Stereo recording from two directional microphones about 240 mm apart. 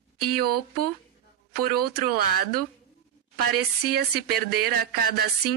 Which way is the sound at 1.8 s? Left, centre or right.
Right.